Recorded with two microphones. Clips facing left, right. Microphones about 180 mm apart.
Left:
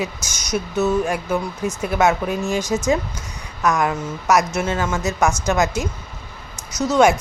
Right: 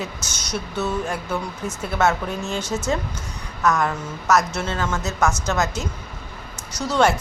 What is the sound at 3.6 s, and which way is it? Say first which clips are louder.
A woman's voice: left 2 dB; 15° left (ahead or behind).